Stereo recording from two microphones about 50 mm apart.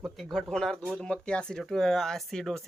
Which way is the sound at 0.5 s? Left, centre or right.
Centre.